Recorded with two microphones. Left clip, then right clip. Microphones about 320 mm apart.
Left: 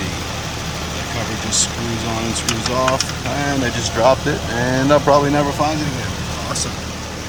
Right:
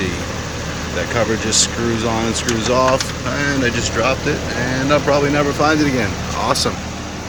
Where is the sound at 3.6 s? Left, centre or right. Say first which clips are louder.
Left 6 dB; centre.